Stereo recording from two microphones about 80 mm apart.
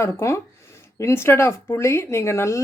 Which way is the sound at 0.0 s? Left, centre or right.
Left.